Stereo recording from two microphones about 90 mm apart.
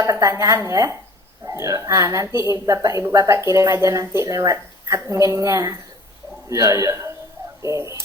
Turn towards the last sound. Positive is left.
turn(degrees=-35)  # may be behind; listen again after turning